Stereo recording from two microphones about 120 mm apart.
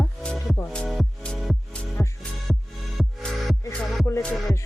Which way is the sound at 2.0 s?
10° left (ahead or behind).